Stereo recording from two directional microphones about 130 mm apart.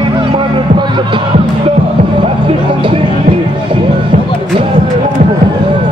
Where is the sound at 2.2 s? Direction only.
40° right (ahead or behind).